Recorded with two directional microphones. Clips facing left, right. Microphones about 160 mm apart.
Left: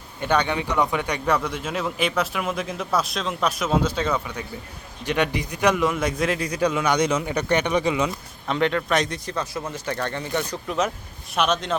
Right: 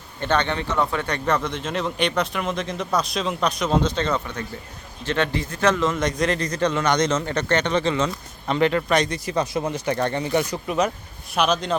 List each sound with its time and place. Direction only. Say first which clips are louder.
0.2 s a man's voice: even; 10° left (ahead or behind)
8.4 s a man's voice: right 2 dB; centre (ahead or behind)
9.3 s speech: right 5 dB; 20° right (ahead or behind)
11.3 s a man's voice: right 1 dB; centre (ahead or behind)